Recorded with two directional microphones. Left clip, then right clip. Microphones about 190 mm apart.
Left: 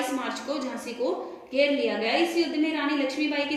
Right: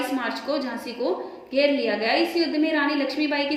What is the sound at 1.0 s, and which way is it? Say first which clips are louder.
A woman's voice: right 2 dB; 50° right (ahead or behind).